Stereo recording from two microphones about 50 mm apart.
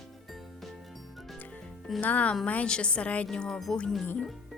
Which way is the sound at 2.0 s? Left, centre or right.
Left.